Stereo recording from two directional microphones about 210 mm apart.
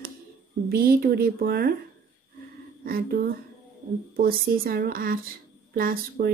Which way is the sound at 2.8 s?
45° right (ahead or behind).